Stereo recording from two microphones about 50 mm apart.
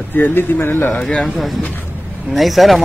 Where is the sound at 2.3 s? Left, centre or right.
Centre.